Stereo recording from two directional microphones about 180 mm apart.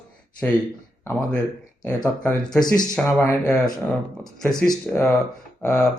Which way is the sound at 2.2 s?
5° left (ahead or behind).